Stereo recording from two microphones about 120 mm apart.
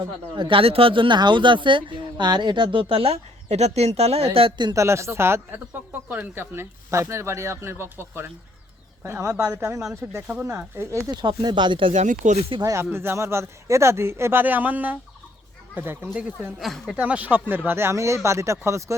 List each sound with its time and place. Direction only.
0.3 s speech: 45° right (ahead or behind)
4.4 s speech: 45° right (ahead or behind)
4.7 s speech: 25° right (ahead or behind)
11.1 s speech: 40° right (ahead or behind)
11.9 s speech: 85° right
12.5 s speech: 35° right (ahead or behind)
12.7 s speech: 20° right (ahead or behind)
16.6 s speech: centre (ahead or behind)
17.0 s speech: 10° right (ahead or behind)